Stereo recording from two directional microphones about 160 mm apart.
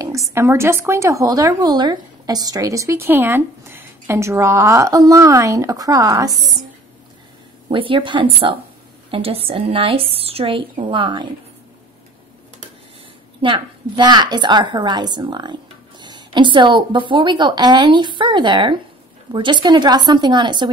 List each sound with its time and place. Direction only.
0.0 s a woman's voice: 20° right (ahead or behind)
7.7 s a woman's voice: 30° right (ahead or behind)
13.4 s a woman's voice: 30° right (ahead or behind)